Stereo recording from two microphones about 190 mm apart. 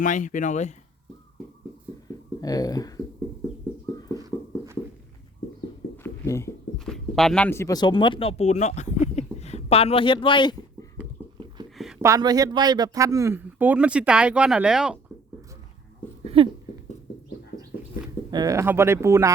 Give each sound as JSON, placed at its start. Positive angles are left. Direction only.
{"t": 0.0, "sound": "speech", "side_deg": 40}
{"t": 2.4, "sound": "speech", "side_deg": 20}
{"t": 4.2, "sound": "horse", "side_deg": -15}
{"t": 6.0, "sound": "a sound", "side_deg": 15}
{"t": 6.7, "sound": "speech", "side_deg": 0}
{"t": 12.0, "sound": "speech", "side_deg": -20}
{"t": 16.2, "sound": "a sound", "side_deg": -30}
{"t": 18.3, "sound": "speech", "side_deg": -20}